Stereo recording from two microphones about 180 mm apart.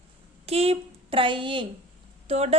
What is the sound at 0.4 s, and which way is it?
A woman's voice, 35° right (ahead or behind).